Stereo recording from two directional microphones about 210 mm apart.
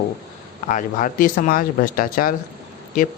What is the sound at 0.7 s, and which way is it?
Speech, 40° left (ahead or behind).